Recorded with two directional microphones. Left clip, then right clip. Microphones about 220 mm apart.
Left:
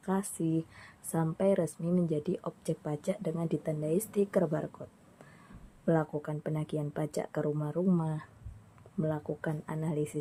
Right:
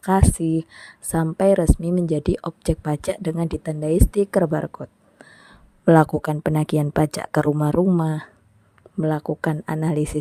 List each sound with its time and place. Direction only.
0.0 s speech: 45° right (ahead or behind)